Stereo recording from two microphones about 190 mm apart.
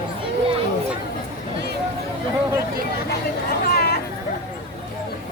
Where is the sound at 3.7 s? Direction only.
55° left (ahead or behind).